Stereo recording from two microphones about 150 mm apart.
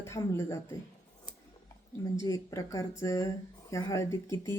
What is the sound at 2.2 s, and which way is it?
Speech, 20° left (ahead or behind).